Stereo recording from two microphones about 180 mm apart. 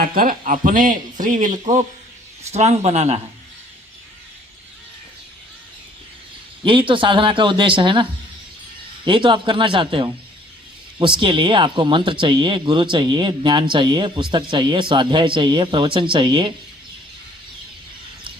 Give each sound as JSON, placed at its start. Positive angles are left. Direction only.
{"t": 0.0, "sound": "speech", "side_deg": -55}
{"t": 6.7, "sound": "speech", "side_deg": -30}
{"t": 9.0, "sound": "speech", "side_deg": -25}